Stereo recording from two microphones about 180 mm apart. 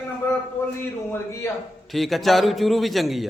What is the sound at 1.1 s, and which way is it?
Speech, 15° left (ahead or behind).